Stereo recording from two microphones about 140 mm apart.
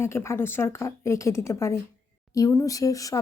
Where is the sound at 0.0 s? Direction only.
20° left (ahead or behind).